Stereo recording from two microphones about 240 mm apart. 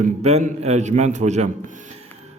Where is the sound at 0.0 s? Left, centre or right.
Right.